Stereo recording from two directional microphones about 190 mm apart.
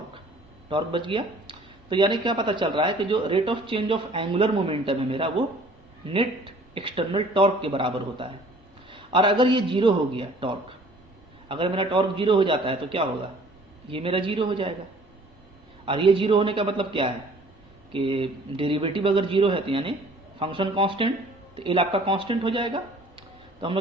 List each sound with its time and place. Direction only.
0.7 s speech: 25° right (ahead or behind)
15.9 s speech: 25° right (ahead or behind)